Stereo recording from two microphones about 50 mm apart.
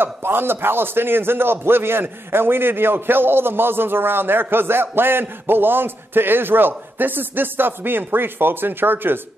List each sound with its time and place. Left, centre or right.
0.0 s a man's voice: right